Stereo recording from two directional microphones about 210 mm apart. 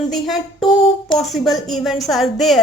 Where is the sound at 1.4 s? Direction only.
Centre (ahead or behind).